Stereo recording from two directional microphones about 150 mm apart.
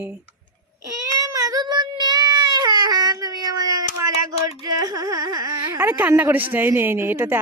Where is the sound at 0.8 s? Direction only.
20° right (ahead or behind).